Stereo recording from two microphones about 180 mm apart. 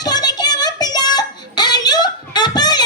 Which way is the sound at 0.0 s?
20° left (ahead or behind).